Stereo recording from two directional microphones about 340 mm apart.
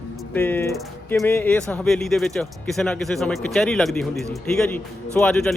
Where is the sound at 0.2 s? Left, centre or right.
Centre.